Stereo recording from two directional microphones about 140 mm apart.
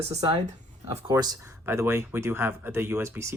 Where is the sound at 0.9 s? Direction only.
30° right (ahead or behind).